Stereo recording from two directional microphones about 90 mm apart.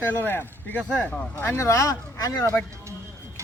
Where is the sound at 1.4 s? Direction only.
30° left (ahead or behind).